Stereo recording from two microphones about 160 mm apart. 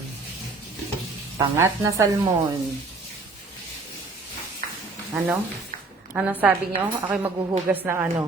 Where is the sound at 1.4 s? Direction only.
20° right (ahead or behind).